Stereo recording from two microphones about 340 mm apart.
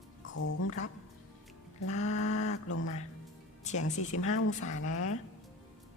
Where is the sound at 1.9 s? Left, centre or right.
Centre.